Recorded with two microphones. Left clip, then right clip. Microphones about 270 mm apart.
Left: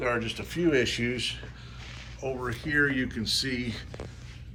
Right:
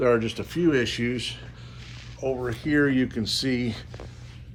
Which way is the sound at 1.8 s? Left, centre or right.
Centre.